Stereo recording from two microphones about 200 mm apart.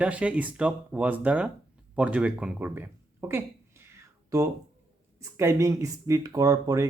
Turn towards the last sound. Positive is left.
turn(degrees=-15)  # may be behind; listen again after turning